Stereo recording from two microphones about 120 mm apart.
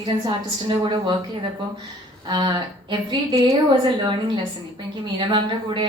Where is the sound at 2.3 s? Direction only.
40° right (ahead or behind).